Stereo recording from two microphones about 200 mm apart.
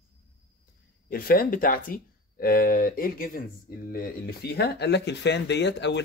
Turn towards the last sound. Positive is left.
turn(degrees=60)  # may be behind; listen again after turning